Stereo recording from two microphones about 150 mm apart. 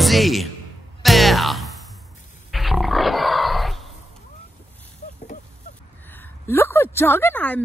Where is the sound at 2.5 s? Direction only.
Centre (ahead or behind).